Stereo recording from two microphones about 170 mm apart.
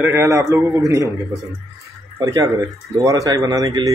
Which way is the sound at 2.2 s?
25° right (ahead or behind).